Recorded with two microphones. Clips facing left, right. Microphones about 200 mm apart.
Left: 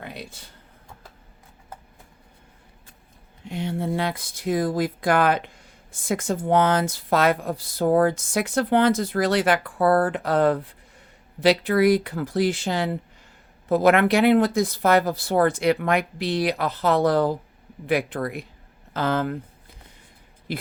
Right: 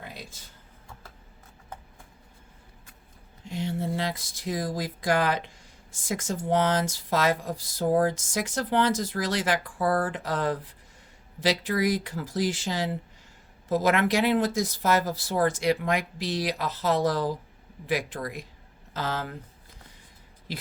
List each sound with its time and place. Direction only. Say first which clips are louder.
0.0 s a sound: left 5 dB; 60° left (ahead or behind)
3.4 s speech: left 3 dB; 60° left (ahead or behind)
20.5 s speech: left 7 dB; 55° left (ahead or behind)